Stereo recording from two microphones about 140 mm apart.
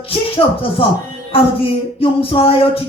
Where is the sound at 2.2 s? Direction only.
40° left (ahead or behind).